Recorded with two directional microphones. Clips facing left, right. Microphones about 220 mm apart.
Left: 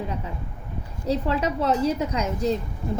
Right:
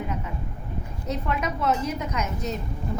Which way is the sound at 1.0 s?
30° left (ahead or behind).